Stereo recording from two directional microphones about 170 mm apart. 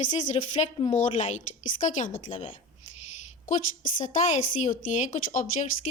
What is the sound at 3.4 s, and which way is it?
A woman's voice, 50° left (ahead or behind).